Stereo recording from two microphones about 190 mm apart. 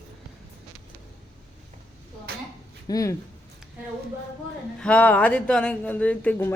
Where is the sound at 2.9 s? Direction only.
15° left (ahead or behind).